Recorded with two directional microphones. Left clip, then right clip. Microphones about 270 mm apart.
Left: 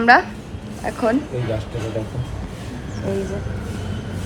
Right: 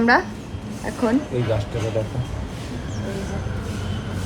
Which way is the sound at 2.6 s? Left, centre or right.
Centre.